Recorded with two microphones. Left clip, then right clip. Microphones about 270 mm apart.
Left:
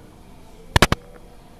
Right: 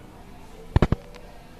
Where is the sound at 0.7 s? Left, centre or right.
Left.